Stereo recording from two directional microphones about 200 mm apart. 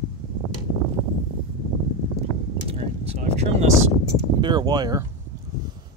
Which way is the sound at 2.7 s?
30° right (ahead or behind).